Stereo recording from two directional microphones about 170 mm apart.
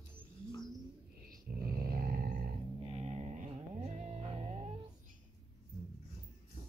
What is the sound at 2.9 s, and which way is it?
Music, 40° right (ahead or behind).